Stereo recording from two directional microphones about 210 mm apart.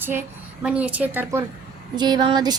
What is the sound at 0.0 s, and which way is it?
A woman's voice, 10° right (ahead or behind).